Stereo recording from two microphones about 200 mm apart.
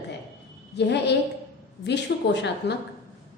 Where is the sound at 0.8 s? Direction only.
60° left (ahead or behind).